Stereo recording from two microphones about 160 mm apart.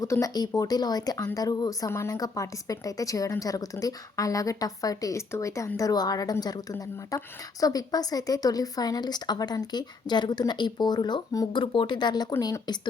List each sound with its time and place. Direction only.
0.0 s speech: 20° left (ahead or behind)